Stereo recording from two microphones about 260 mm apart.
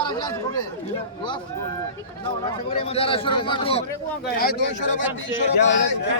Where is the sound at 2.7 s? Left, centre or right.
Left.